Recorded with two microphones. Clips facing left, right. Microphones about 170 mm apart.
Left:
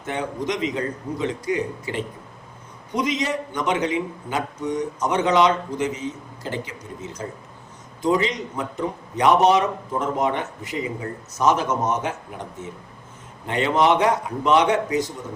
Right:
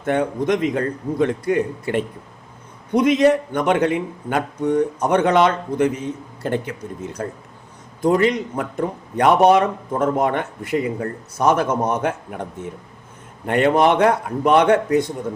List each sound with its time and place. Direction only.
0.0 s a man's voice: 55° right (ahead or behind)